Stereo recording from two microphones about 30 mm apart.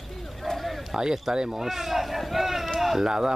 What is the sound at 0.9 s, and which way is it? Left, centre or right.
Speech, right.